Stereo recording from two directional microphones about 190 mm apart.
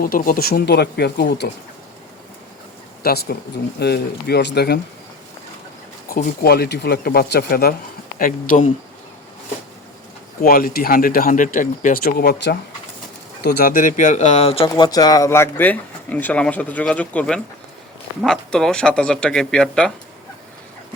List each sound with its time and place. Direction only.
0.0 s speech: 50° left (ahead or behind)
3.0 s speech: 55° left (ahead or behind)
6.1 s speech: 55° left (ahead or behind)
10.4 s speech: 50° left (ahead or behind); by 19.9 s 5° left (ahead or behind)